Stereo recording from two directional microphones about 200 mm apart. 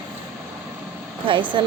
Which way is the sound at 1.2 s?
25° right (ahead or behind).